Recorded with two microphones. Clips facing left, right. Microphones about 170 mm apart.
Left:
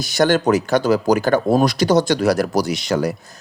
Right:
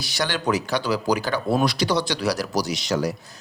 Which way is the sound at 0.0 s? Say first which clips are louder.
Left 10 dB; 45° left (ahead or behind).